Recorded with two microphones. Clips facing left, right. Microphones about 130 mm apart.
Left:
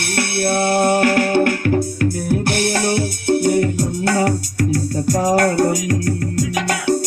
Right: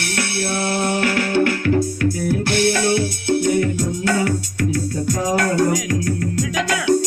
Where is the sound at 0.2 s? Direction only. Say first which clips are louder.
Left 5 dB; 55° left (ahead or behind).